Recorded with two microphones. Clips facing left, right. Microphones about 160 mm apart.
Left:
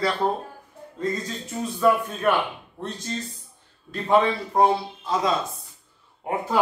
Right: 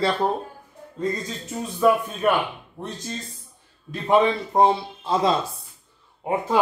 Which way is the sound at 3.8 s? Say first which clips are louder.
Right 1 dB; 20° right (ahead or behind).